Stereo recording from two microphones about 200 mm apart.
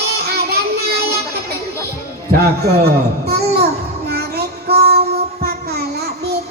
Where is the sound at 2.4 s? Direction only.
50° right (ahead or behind).